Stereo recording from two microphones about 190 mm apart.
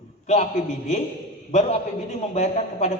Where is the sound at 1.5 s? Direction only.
35° left (ahead or behind).